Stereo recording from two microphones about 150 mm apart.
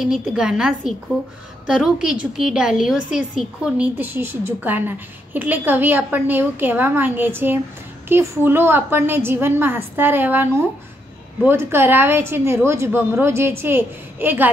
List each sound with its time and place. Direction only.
0.0 s a woman's voice: 5° right (ahead or behind)